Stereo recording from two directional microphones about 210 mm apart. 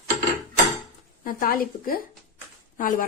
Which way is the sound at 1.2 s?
40° left (ahead or behind).